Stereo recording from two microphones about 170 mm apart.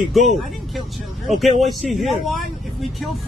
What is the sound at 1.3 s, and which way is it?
A man's voice, centre (ahead or behind).